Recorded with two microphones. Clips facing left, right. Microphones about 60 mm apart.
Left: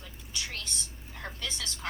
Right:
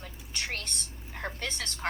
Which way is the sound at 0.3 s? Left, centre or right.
Right.